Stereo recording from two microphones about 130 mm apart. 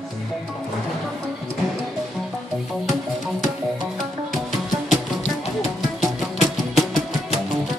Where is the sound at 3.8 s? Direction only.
Centre (ahead or behind).